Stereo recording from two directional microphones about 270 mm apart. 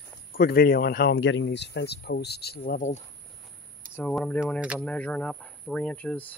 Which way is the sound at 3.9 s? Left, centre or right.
Centre.